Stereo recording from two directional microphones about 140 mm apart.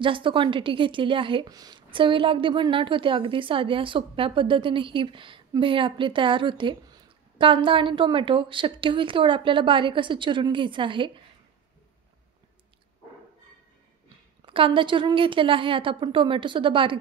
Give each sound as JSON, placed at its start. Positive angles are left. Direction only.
{"t": 0.0, "sound": "a woman's voice", "side_deg": -35}
{"t": 14.4, "sound": "a woman's voice", "side_deg": -40}